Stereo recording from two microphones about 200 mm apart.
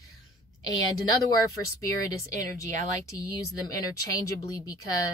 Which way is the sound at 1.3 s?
15° left (ahead or behind).